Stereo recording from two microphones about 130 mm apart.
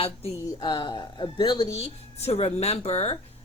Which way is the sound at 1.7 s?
50° left (ahead or behind).